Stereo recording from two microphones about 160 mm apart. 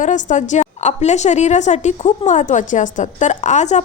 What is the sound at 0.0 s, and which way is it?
A woman's voice, 50° left (ahead or behind).